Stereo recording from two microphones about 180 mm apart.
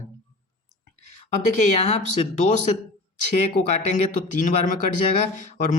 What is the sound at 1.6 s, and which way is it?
Speech, 35° left (ahead or behind).